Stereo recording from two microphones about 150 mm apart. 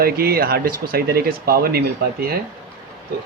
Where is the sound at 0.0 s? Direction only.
90° right.